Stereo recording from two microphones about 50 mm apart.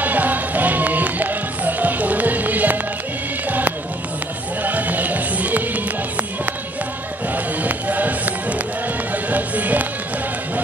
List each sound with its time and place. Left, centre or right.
0.0 s music: right
7.3 s music: right